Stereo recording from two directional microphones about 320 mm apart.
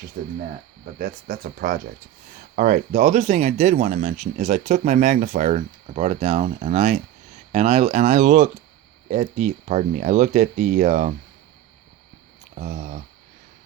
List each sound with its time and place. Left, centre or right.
0.2 s speech: right
12.5 s speech: right